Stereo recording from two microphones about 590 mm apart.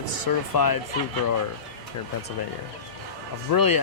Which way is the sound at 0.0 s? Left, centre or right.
Left.